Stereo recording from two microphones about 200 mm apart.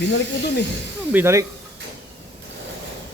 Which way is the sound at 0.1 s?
55° left (ahead or behind).